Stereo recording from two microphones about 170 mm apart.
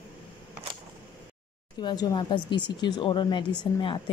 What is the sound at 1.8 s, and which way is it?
A woman's voice, 25° left (ahead or behind).